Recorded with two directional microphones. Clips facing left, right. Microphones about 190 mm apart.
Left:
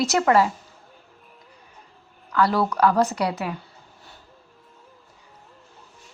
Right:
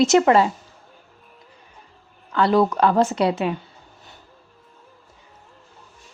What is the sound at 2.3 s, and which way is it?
Speech, 25° right (ahead or behind).